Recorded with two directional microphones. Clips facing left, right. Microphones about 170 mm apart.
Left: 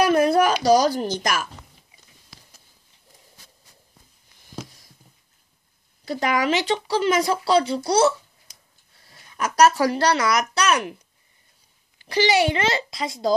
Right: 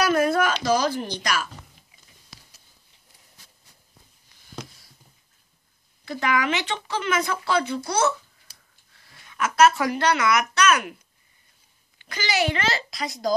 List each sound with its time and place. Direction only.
0.1 s a sound: 35° left (ahead or behind)
0.7 s speech: 35° left (ahead or behind)
6.0 s speech: 40° left (ahead or behind)
12.0 s a child's voice: 30° left (ahead or behind)